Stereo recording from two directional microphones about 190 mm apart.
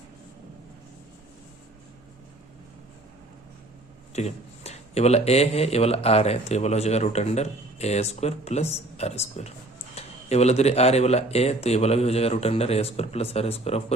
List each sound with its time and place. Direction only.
4.1 s speech: 35° left (ahead or behind)